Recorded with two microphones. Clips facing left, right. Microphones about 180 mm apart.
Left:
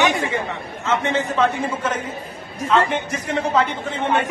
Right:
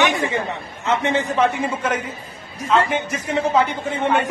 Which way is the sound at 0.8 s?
15° right (ahead or behind).